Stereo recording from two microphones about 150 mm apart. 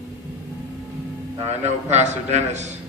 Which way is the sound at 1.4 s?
45° right (ahead or behind).